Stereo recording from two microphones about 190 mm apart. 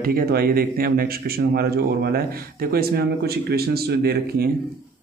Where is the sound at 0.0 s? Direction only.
50° right (ahead or behind).